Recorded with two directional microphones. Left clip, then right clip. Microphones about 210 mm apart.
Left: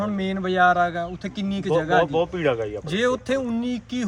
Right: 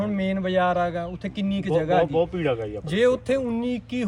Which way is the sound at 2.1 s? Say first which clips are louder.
Left 1 dB; 30° left (ahead or behind).